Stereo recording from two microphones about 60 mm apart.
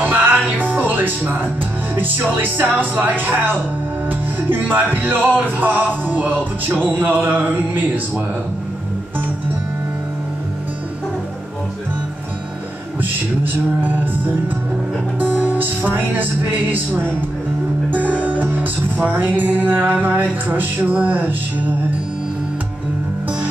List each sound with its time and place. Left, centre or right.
0.0 s music: right
13.4 s music: right
15.1 s music: right